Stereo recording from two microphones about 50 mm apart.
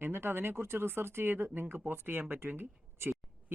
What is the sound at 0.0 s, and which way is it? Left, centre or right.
Speech, right.